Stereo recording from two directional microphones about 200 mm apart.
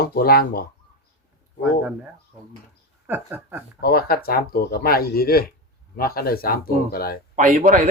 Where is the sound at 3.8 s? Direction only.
50° left (ahead or behind).